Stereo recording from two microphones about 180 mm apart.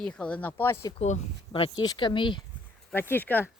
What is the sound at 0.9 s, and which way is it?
Speech, 40° left (ahead or behind).